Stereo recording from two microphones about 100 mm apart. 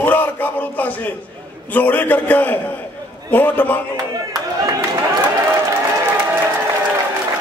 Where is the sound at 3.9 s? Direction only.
40° right (ahead or behind).